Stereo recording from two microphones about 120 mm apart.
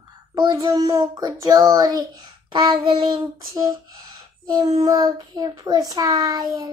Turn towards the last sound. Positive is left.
turn(degrees=-30)  # may be behind; listen again after turning